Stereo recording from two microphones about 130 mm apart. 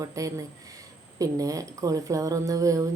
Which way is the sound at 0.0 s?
25° right (ahead or behind).